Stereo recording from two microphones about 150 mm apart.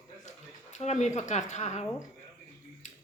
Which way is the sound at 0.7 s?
50° left (ahead or behind).